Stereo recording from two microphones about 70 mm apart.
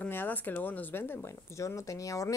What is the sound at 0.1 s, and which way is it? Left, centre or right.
Speech, left.